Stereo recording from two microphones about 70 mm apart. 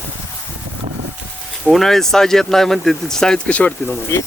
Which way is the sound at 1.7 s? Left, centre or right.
Centre.